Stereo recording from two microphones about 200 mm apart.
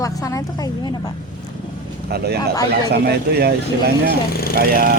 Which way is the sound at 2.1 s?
55° right (ahead or behind).